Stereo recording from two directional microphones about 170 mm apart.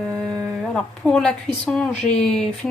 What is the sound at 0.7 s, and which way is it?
Speech, 5° left (ahead or behind).